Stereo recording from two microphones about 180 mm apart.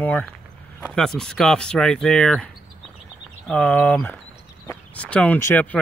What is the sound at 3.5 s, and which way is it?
Speech, 10° left (ahead or behind).